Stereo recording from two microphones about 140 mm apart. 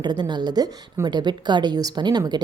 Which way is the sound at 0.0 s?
30° right (ahead or behind).